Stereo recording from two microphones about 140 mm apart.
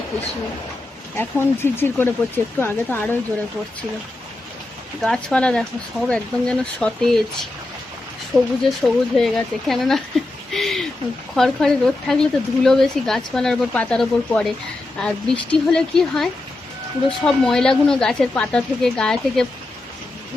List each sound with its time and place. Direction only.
1.1 s speech: 15° left (ahead or behind)
5.0 s a woman's voice: 5° left (ahead or behind)
10.5 s a sound: centre (ahead or behind)
11.3 s a woman's voice: centre (ahead or behind)